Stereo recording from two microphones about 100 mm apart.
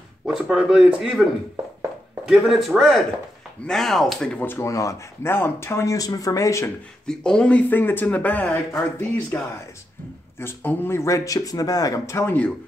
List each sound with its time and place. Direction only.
0.3 s speech: 5° right (ahead or behind)
2.2 s speech: 5° right (ahead or behind)
4.5 s speech: 30° left (ahead or behind)
7.1 s speech: 5° left (ahead or behind)
10.4 s speech: 20° left (ahead or behind)